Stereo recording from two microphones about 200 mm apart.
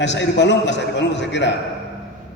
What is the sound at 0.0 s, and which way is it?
A man's voice, 65° left (ahead or behind).